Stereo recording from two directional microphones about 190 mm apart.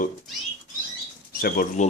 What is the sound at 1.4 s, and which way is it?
Speech, 45° left (ahead or behind).